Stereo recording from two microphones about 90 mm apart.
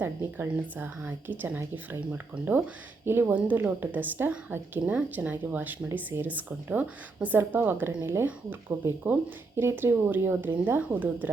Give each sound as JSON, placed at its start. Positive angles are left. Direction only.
{"t": 0.0, "sound": "speech", "side_deg": -20}